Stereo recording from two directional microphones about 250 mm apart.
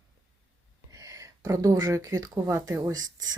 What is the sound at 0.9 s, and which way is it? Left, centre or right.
Speech, centre.